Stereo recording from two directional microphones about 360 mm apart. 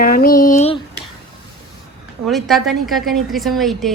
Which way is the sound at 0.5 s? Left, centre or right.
Centre.